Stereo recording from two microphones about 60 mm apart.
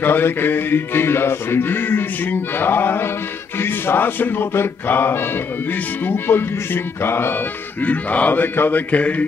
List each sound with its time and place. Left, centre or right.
0.0 s music: left
7.8 s mantra: left